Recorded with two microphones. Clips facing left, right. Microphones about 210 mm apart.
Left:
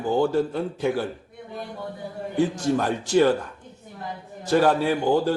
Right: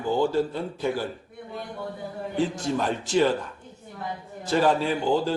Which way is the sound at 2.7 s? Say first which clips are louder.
Left 3 dB; 50° left (ahead or behind).